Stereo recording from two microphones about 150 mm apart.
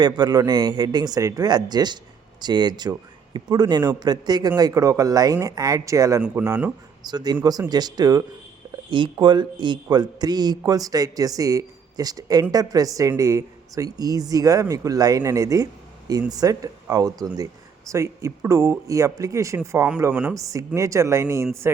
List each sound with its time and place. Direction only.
0.0 s speech: 25° right (ahead or behind)
6.2 s speech: 10° right (ahead or behind)
7.0 s speech: 25° right (ahead or behind)